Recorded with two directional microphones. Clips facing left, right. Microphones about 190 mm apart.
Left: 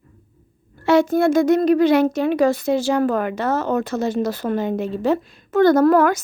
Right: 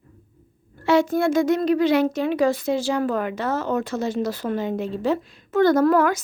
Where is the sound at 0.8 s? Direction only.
65° left (ahead or behind).